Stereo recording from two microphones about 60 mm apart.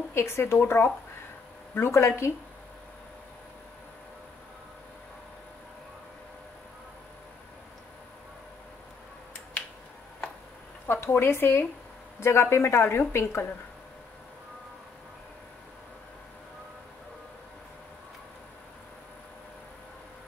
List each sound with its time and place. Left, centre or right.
0.1 s a woman's voice: left
1.8 s a woman's voice: left
10.9 s a woman's voice: left